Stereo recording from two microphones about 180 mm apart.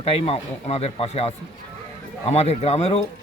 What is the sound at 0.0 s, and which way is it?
Speech, 35° left (ahead or behind).